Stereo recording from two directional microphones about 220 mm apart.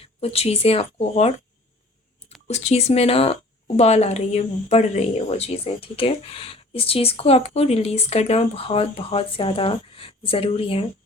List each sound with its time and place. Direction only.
0.0 s speech: 25° left (ahead or behind)
2.5 s speech: 30° left (ahead or behind)